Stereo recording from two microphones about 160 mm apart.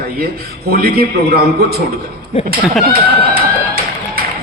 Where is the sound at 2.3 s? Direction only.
40° left (ahead or behind).